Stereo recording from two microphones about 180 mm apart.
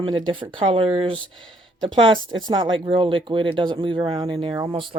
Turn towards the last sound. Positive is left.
turn(degrees=-25)  # may be behind; listen again after turning